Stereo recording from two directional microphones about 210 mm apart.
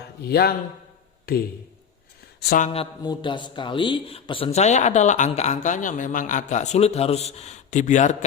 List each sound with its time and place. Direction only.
0.2 s a man's voice: 50° left (ahead or behind)
2.4 s speech: 45° left (ahead or behind)
2.7 s a man's voice: 20° left (ahead or behind); by 8.1 s 35° left (ahead or behind)